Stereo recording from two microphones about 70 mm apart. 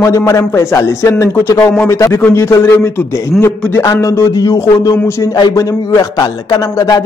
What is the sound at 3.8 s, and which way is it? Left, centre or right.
Speech, left.